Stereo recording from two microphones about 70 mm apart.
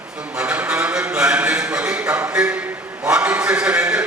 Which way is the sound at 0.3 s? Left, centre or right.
Centre.